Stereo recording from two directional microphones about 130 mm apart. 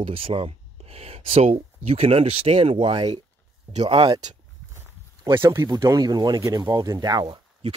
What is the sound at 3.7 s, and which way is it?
Speech, 50° right (ahead or behind).